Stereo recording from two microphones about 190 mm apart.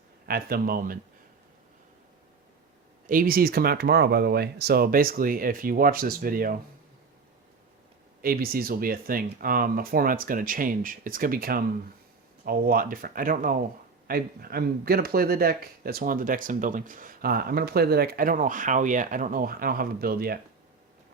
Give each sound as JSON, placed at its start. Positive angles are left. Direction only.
{"t": 0.3, "sound": "speech", "side_deg": -55}
{"t": 3.1, "sound": "speech", "side_deg": -50}
{"t": 8.2, "sound": "speech", "side_deg": -50}